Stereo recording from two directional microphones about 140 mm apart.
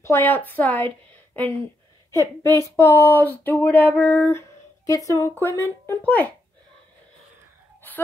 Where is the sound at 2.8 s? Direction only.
15° left (ahead or behind).